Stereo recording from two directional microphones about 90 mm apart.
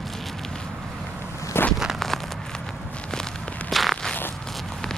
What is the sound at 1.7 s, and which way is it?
Walk, centre (ahead or behind).